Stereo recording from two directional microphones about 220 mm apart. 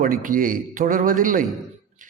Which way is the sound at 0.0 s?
35° right (ahead or behind).